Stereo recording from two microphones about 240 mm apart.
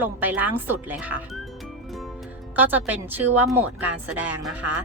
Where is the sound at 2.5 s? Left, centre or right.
Centre.